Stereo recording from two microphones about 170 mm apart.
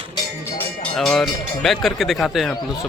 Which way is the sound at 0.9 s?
Centre (ahead or behind).